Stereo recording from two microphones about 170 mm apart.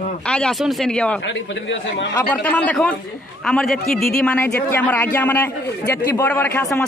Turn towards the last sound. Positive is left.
turn(degrees=10)  # may be behind; listen again after turning